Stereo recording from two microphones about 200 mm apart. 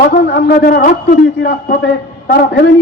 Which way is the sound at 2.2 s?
50° left (ahead or behind).